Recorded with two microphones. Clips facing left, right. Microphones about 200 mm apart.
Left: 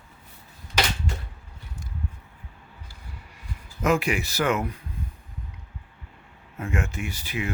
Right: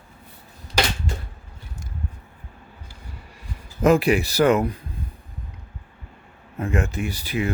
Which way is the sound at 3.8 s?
35° right (ahead or behind).